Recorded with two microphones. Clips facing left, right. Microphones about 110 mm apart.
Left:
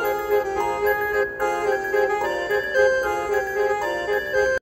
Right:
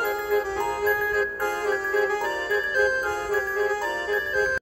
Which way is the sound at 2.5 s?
35° left (ahead or behind).